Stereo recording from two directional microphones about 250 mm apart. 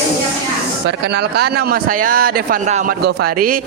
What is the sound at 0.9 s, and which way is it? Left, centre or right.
Speech, right.